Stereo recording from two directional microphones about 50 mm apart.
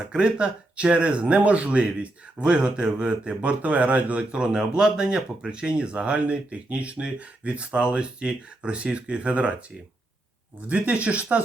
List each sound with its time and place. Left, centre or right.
0.1 s speech: centre